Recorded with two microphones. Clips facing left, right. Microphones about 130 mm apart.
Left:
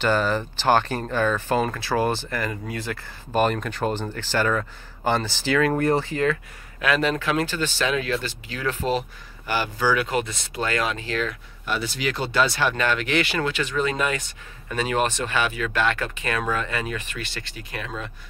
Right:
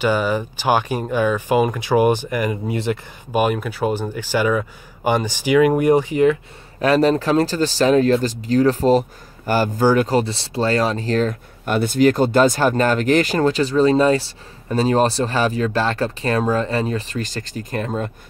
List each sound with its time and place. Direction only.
0.0 s speech: 10° right (ahead or behind)
3.3 s speech: 10° right (ahead or behind)
6.8 s speech: 35° right (ahead or behind)